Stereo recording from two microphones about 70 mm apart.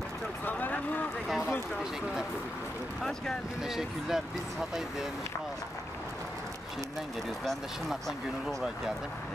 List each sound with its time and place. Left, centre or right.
0.5 s a sound: left
3.0 s speech: centre
3.6 s speech: centre
8.5 s speech: centre